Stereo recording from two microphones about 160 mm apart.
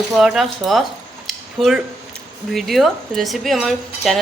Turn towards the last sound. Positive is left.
turn(degrees=0)  # may be behind; listen again after turning